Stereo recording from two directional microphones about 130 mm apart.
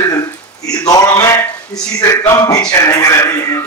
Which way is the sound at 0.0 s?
25° left (ahead or behind).